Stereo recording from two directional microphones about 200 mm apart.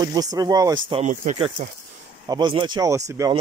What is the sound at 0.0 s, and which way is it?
Speech, 20° right (ahead or behind).